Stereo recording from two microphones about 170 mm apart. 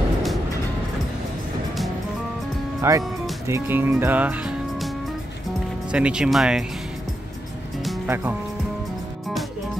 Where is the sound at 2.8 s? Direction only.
15° right (ahead or behind).